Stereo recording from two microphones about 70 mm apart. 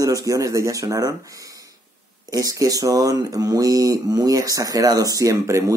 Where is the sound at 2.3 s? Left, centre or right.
Right.